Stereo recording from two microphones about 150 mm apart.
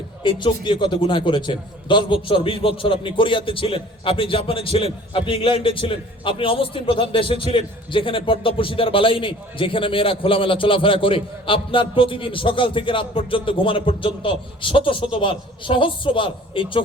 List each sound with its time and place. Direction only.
0.2 s a man's voice: 30° left (ahead or behind)